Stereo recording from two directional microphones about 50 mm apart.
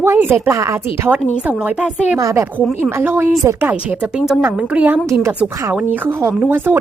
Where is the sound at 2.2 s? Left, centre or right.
Right.